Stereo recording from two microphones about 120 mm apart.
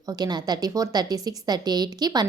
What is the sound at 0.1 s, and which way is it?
A woman's voice, 35° right (ahead or behind).